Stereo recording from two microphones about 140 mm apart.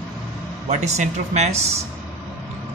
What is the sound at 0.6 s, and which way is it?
A man's voice, 55° right (ahead or behind).